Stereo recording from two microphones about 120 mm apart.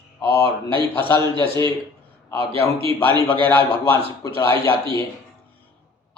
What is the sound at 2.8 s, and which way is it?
Speech, 45° right (ahead or behind).